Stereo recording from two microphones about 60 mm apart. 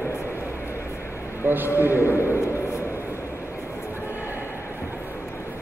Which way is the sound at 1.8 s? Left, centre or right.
Right.